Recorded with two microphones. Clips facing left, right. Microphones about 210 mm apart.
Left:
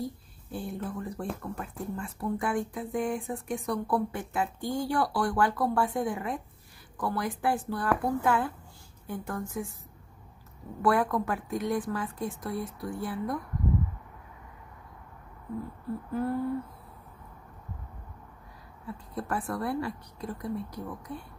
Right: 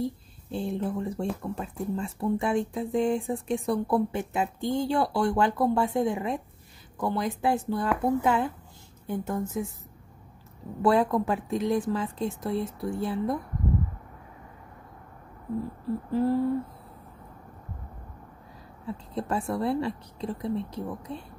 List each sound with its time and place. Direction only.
0.0 s speech: 25° right (ahead or behind)
10.8 s speech: 25° right (ahead or behind)
16.1 s speech: 30° right (ahead or behind)
19.1 s speech: 25° right (ahead or behind)